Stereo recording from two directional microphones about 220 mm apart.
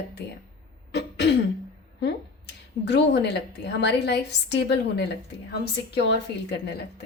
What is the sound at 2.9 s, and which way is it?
A woman's voice, 50° left (ahead or behind).